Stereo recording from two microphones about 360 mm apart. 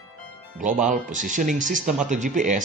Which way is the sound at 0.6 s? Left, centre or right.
Right.